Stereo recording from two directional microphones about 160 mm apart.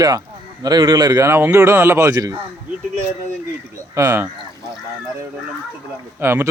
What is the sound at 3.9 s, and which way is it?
Speech, 20° right (ahead or behind).